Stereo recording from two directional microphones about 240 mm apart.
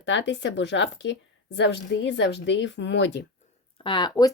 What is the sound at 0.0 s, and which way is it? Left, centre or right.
A woman's voice, left.